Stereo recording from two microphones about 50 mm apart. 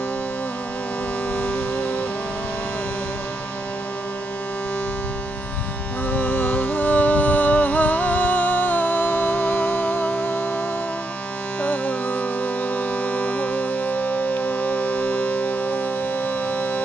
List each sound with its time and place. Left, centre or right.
1.3 s music: left
6.1 s music: left
11.6 s music: left